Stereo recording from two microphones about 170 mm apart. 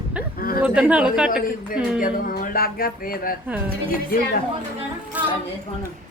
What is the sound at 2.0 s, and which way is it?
Music, 55° left (ahead or behind).